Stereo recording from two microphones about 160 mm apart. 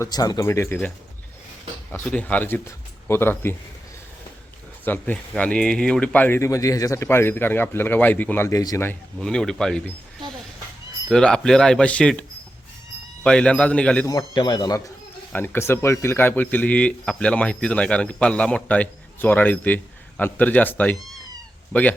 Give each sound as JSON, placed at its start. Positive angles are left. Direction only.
{"t": 0.0, "sound": "speech", "side_deg": 25}
{"t": 1.9, "sound": "a man's voice", "side_deg": 10}
{"t": 4.9, "sound": "speech", "side_deg": 10}
{"t": 9.1, "sound": "speech", "side_deg": 5}
{"t": 11.1, "sound": "speech", "side_deg": 5}
{"t": 13.2, "sound": "speech", "side_deg": 5}
{"t": 14.1, "sound": "speech", "side_deg": 25}
{"t": 15.3, "sound": "speech", "side_deg": 15}